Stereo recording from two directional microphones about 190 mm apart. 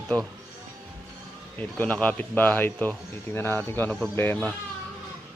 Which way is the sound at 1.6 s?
10° left (ahead or behind).